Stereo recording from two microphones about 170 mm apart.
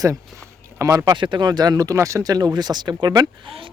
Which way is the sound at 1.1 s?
30° right (ahead or behind).